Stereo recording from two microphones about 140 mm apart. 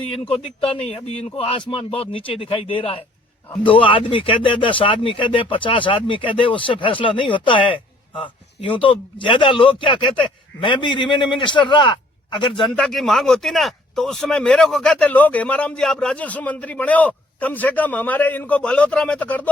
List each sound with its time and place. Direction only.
0.6 s a man's voice: 45° left (ahead or behind)
12.7 s speech: centre (ahead or behind)